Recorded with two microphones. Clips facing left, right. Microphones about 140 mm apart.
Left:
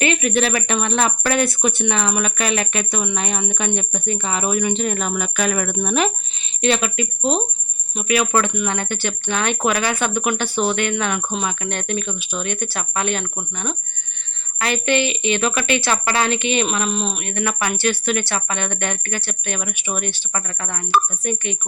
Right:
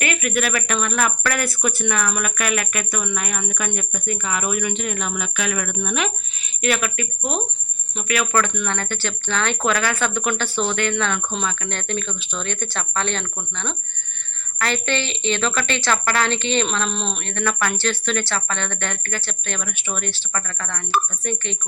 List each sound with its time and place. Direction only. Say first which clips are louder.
0.0 s a woman's voice: left 4 dB; 25° left (ahead or behind)